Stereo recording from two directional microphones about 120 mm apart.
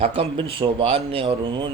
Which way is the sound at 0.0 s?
50° right (ahead or behind).